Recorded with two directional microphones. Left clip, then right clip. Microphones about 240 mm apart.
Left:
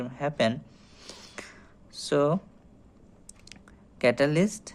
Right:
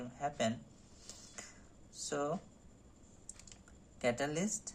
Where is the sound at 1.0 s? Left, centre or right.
Left.